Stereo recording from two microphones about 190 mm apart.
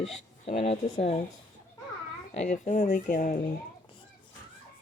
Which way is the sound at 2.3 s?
40° left (ahead or behind).